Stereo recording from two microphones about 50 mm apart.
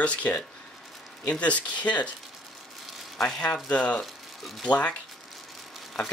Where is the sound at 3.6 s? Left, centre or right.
Left.